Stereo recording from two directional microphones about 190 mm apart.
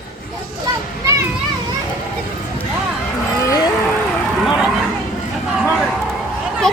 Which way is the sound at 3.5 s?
20° left (ahead or behind).